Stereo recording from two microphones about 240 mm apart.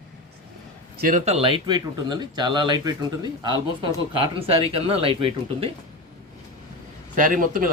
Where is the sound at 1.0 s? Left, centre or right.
Right.